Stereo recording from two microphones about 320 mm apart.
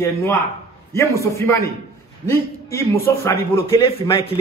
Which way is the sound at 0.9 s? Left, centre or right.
Centre.